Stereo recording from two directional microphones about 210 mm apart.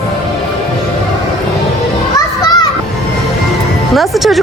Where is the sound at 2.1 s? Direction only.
20° left (ahead or behind).